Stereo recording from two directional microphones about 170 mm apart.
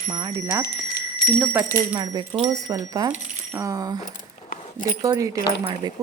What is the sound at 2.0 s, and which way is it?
Speech, 25° right (ahead or behind).